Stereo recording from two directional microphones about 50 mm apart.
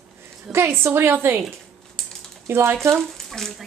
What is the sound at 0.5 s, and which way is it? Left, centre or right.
Speech, right.